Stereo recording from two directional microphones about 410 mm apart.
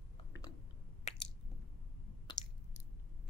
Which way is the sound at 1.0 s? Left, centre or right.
Centre.